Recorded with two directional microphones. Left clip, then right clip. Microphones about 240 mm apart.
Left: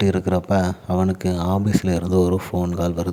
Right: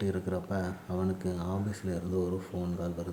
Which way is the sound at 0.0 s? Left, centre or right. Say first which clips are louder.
Left 13 dB; left.